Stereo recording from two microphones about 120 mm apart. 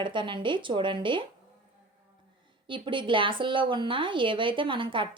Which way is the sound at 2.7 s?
45° right (ahead or behind).